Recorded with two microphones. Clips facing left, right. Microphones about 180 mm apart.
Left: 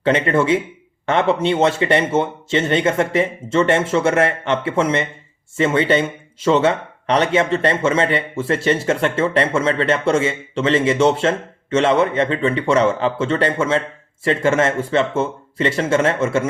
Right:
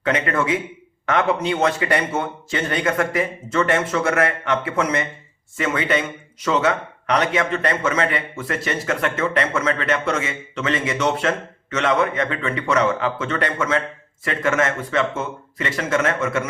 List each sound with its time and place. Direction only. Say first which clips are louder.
0.0 s speech: left 5 dB; 30° left (ahead or behind)